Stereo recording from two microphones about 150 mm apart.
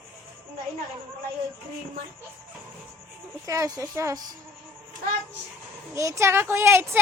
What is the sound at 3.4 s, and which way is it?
Speech, 20° right (ahead or behind).